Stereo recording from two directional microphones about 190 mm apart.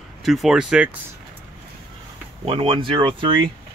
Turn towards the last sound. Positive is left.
turn(degrees=-25)  # may be behind; listen again after turning